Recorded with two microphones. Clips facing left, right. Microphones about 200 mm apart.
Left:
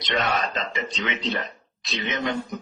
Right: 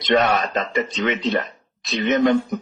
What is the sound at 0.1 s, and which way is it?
Speech, 50° right (ahead or behind).